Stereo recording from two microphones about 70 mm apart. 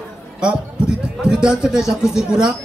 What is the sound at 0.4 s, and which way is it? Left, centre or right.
A man's voice, centre.